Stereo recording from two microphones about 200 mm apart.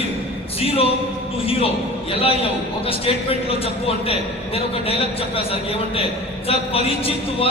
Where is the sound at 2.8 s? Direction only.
30° left (ahead or behind).